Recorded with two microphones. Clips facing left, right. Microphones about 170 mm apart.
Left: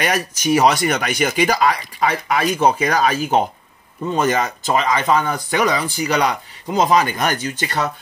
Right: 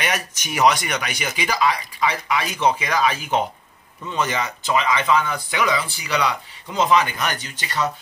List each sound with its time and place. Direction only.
0.0 s speech: 40° left (ahead or behind)